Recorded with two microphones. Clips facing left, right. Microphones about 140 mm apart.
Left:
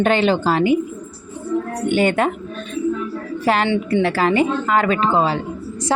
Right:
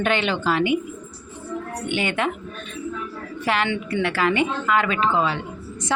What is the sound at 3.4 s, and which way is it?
A woman's voice, 35° left (ahead or behind).